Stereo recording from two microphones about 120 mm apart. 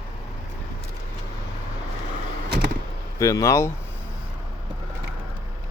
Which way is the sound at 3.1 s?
30° left (ahead or behind).